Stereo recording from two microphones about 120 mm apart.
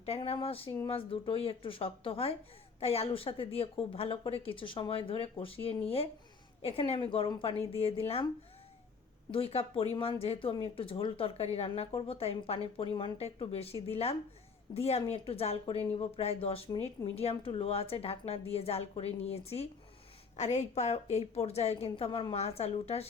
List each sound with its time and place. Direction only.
0.0 s a woman's voice: 55° left (ahead or behind)
9.3 s a woman's voice: 55° left (ahead or behind)
20.3 s a woman's voice: 70° left (ahead or behind)
21.8 s a woman's voice: 50° left (ahead or behind)